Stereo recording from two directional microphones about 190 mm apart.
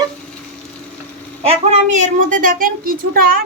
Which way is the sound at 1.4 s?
35° right (ahead or behind).